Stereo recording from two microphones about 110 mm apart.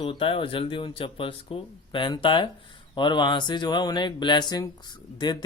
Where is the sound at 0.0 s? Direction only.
55° left (ahead or behind).